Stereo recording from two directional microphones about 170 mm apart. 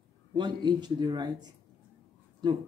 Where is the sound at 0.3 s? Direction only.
25° right (ahead or behind).